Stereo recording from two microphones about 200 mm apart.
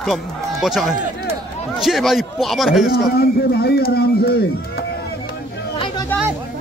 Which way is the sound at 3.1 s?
50° left (ahead or behind).